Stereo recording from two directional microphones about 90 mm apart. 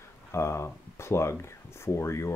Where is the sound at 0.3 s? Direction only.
30° left (ahead or behind).